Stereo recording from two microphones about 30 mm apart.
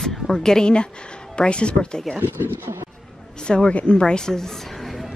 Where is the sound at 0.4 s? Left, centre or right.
Left.